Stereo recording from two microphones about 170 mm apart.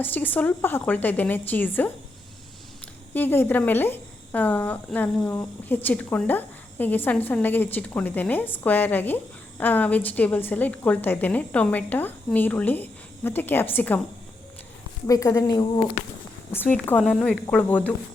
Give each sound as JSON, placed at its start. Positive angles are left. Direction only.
{"t": 0.0, "sound": "a woman's voice", "side_deg": 10}
{"t": 3.2, "sound": "a woman's voice", "side_deg": 10}
{"t": 15.0, "sound": "speech", "side_deg": 20}
{"t": 16.5, "sound": "a woman's voice", "side_deg": 10}